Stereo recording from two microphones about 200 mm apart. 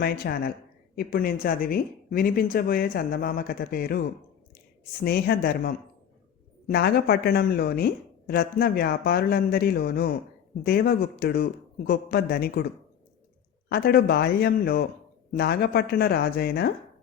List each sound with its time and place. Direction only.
0.0 s speech: 50° left (ahead or behind)
5.0 s speech: 50° left (ahead or behind)
13.7 s speech: 50° left (ahead or behind)